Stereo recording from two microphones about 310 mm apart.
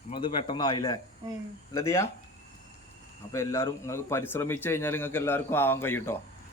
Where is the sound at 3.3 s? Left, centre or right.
Centre.